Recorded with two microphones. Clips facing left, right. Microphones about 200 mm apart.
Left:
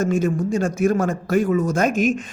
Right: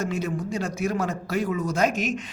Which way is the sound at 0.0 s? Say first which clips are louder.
Left 8 dB; 50° left (ahead or behind).